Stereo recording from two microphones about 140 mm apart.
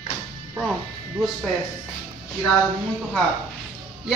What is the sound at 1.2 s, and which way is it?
Speech, centre (ahead or behind).